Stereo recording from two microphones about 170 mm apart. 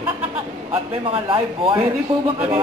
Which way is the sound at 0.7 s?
30° right (ahead or behind).